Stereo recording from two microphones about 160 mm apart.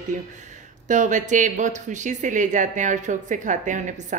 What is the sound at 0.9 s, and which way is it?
A woman's voice, 50° right (ahead or behind).